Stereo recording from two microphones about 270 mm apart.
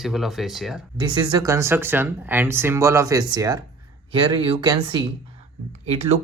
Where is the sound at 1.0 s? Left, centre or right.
Centre.